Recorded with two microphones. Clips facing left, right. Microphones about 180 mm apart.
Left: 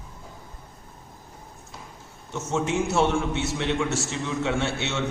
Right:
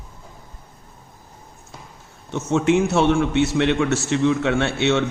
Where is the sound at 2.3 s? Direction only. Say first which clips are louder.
Right 8 dB; 65° right (ahead or behind).